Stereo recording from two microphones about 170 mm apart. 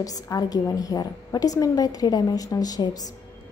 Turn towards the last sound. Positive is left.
turn(degrees=20)  # may be behind; listen again after turning